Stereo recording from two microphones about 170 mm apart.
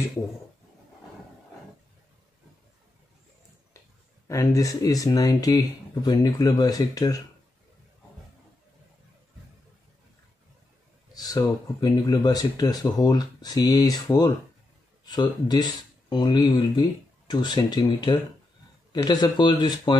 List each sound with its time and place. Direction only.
4.3 s speech: 20° left (ahead or behind)
11.1 s speech: 25° left (ahead or behind)